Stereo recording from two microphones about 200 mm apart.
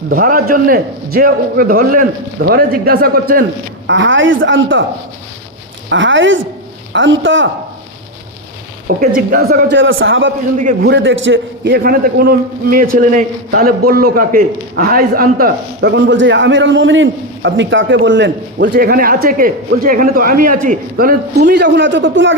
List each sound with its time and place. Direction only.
0.1 s a man's voice: 45° right (ahead or behind)
3.8 s a woman's voice: 70° right (ahead or behind)
5.9 s a woman's voice: 70° right (ahead or behind)
9.0 s a man's voice: 45° right (ahead or behind)
9.8 s a woman's voice: 75° right (ahead or behind)
10.6 s a man's voice: 40° right (ahead or behind)
10.9 s a man's voice: 70° right (ahead or behind)